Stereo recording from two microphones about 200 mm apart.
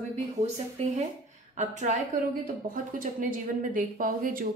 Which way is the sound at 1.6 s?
35° right (ahead or behind).